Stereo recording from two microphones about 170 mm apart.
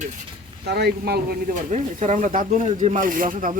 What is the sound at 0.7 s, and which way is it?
Speech, 70° right (ahead or behind).